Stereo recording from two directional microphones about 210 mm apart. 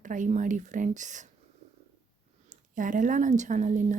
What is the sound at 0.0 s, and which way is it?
Speech, 35° right (ahead or behind).